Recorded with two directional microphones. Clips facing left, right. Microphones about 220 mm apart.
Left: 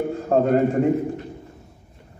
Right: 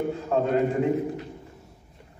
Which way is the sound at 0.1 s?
45° left (ahead or behind).